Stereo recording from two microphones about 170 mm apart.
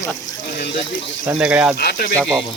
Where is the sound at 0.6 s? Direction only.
80° left.